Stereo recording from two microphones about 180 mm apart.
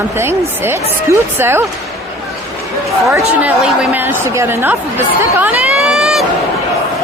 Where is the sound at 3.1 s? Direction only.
15° right (ahead or behind).